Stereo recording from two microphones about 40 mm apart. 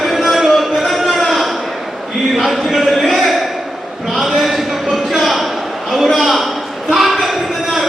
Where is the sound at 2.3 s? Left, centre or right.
Centre.